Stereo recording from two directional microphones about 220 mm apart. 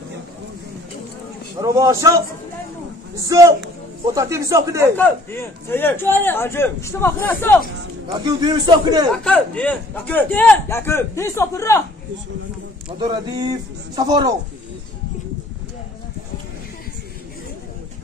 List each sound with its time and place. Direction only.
1.6 s speech: 15° right (ahead or behind)
3.3 s speech: 15° right (ahead or behind)
4.9 s a man's voice: 10° left (ahead or behind)
8.1 s a man's voice: 20° right (ahead or behind)
9.2 s a man's voice: 5° left (ahead or behind)
13.0 s a man's voice: 20° right (ahead or behind)